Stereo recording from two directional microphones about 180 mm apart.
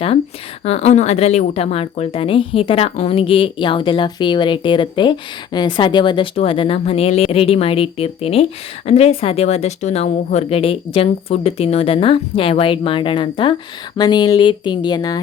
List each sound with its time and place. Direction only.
0.6 s a woman's voice: 35° left (ahead or behind)